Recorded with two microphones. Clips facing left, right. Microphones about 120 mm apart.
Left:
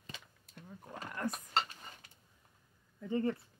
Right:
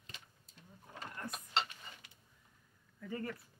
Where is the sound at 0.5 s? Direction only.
65° left (ahead or behind).